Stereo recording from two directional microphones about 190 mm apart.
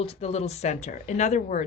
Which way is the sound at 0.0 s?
30° left (ahead or behind).